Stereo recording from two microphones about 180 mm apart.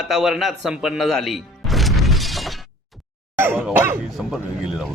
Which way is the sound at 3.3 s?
10° right (ahead or behind).